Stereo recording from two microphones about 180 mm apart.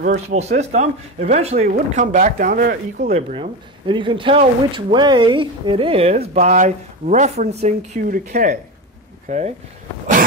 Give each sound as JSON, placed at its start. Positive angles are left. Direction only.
{"t": 0.0, "sound": "speech", "side_deg": -40}
{"t": 3.1, "sound": "speech", "side_deg": -35}